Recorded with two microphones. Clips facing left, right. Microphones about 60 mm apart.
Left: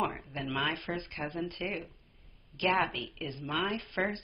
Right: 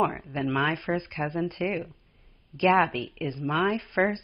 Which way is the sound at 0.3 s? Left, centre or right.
Right.